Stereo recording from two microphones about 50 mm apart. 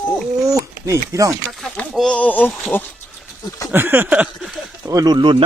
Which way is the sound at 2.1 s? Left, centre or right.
Left.